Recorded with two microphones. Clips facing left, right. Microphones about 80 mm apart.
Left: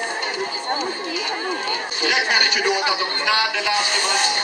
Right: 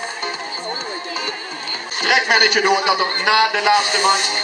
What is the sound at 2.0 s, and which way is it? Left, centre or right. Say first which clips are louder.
A man's voice: right 5 dB; right.